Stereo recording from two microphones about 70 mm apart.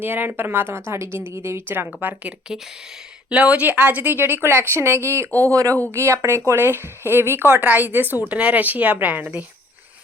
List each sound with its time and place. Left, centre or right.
0.0 s a woman's voice: right
5.5 s a woman's voice: right